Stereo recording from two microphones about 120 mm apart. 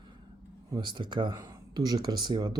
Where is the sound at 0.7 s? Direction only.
40° right (ahead or behind).